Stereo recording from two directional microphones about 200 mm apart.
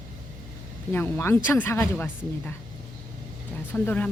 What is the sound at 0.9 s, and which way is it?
Speech, 10° left (ahead or behind).